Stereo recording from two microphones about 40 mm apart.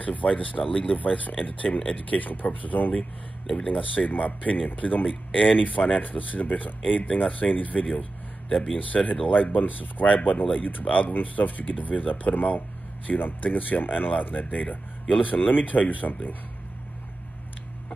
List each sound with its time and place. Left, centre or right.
0.0 s speech: left
1.0 s speech: left
3.5 s speech: left
7.8 s a sound: left
8.7 s speech: left